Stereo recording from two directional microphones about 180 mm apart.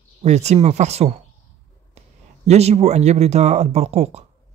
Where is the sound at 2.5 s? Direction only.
35° right (ahead or behind).